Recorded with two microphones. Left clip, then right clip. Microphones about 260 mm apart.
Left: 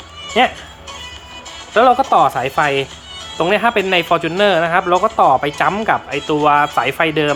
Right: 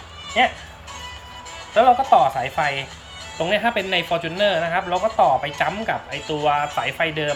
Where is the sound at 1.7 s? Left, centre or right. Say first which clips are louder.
Left 3 dB; left.